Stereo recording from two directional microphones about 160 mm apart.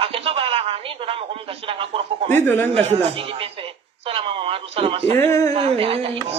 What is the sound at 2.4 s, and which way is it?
Speech, 15° left (ahead or behind).